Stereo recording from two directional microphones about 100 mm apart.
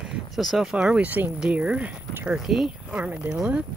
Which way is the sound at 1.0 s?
15° right (ahead or behind).